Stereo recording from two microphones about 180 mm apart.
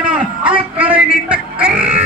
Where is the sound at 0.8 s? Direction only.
10° right (ahead or behind).